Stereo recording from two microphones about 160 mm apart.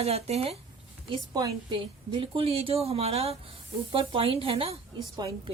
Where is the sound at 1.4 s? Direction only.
30° right (ahead or behind).